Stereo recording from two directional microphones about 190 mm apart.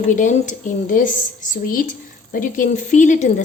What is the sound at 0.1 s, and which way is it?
A woman's voice, 40° left (ahead or behind).